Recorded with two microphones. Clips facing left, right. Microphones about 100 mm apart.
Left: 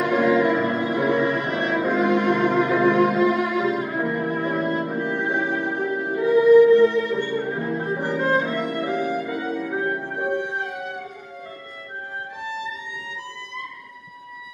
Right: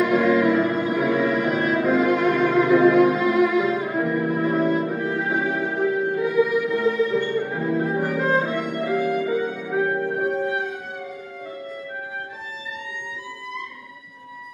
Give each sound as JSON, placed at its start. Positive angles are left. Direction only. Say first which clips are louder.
{"t": 0.1, "sound": "music", "louder": "right 1 dB", "side_deg": 0}